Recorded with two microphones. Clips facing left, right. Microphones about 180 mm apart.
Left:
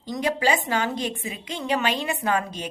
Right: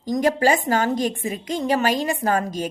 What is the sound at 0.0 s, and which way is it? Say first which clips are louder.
A woman's voice: right 5 dB; 45° right (ahead or behind).